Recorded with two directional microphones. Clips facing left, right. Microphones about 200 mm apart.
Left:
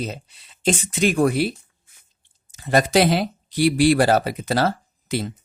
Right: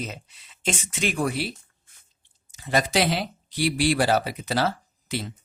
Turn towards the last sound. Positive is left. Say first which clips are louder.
# left 6 dB
turn(degrees=45)  # may be behind; listen again after turning